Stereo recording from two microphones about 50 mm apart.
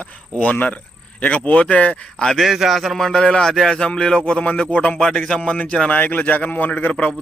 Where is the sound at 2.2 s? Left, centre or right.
Centre.